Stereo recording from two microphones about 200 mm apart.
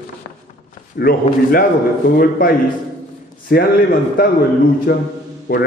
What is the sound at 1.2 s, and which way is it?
A man's voice, 45° left (ahead or behind).